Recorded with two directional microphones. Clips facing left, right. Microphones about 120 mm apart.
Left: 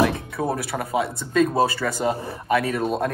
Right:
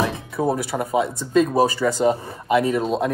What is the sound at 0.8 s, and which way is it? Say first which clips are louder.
Speech: right 2 dB; 20° right (ahead or behind).